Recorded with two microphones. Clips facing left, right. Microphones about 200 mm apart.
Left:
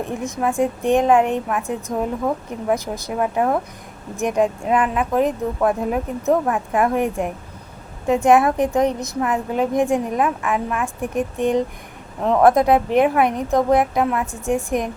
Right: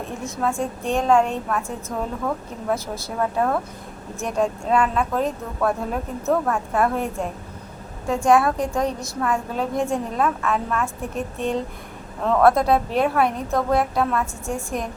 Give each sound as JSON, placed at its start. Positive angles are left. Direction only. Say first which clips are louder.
{"t": 0.2, "sound": "a woman's voice", "louder": "left 4 dB", "side_deg": 15}